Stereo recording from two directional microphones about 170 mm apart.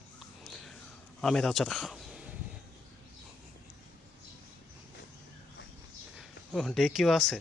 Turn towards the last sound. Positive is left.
turn(degrees=0)  # may be behind; listen again after turning